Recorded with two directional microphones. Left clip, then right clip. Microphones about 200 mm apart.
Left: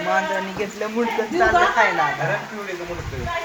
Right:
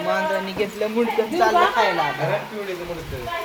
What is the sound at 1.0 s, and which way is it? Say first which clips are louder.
Speech: right 1 dB; 10° right (ahead or behind).